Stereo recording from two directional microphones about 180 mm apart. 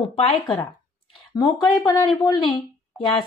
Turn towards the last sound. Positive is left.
turn(degrees=25)  # may be behind; listen again after turning